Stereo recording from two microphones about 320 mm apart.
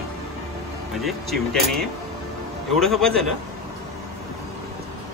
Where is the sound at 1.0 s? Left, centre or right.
Centre.